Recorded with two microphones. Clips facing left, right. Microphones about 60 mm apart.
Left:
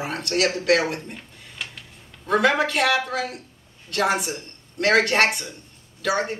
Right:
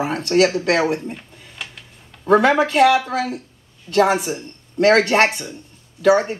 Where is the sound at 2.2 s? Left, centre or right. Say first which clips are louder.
Right 5 dB; right.